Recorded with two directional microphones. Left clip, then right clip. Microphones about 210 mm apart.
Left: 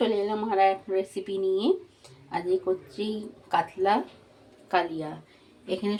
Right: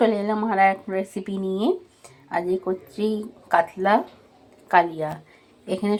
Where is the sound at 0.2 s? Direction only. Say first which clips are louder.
Right 4 dB; 20° right (ahead or behind).